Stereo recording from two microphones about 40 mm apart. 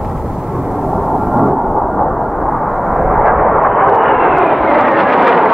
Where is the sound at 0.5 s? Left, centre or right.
Centre.